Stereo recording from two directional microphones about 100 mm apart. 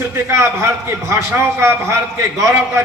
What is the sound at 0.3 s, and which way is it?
A man's voice, 25° right (ahead or behind).